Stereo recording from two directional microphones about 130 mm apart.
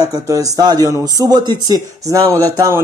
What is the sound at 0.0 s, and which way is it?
Speech, 25° right (ahead or behind).